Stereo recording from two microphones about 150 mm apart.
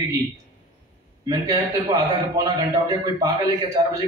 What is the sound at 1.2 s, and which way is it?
Speech, 25° right (ahead or behind).